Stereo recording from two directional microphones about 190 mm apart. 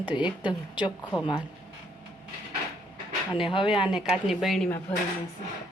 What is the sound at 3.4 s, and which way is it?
Speech, 25° left (ahead or behind).